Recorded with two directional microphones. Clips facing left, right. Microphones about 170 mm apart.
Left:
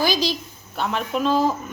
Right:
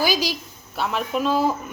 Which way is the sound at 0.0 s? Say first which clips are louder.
Left 1 dB; 10° right (ahead or behind).